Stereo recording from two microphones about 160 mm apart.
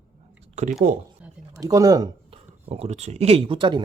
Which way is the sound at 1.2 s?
5° right (ahead or behind).